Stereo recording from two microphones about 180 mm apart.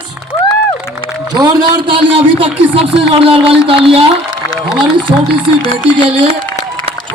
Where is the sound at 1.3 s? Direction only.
25° right (ahead or behind).